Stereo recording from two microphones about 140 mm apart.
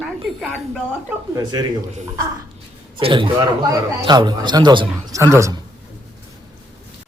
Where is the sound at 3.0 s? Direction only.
35° right (ahead or behind).